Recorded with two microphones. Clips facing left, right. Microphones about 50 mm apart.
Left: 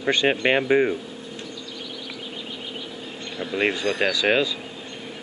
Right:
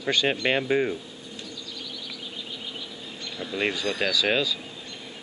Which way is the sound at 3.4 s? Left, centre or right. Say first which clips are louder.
Left 4 dB; centre.